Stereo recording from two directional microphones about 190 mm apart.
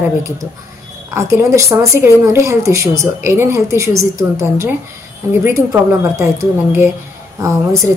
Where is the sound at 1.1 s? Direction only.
15° right (ahead or behind).